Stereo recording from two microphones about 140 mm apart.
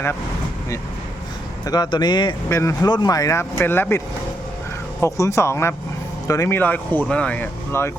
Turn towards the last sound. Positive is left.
turn(degrees=15)  # may be behind; listen again after turning